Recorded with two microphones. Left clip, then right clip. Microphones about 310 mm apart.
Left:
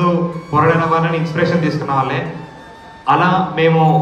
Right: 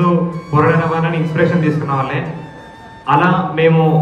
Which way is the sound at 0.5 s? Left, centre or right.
Left.